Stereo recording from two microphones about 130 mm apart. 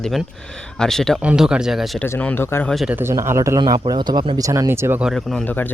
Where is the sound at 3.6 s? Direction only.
35° right (ahead or behind).